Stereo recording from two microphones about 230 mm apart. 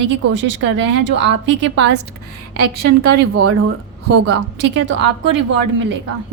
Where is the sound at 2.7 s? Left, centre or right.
Right.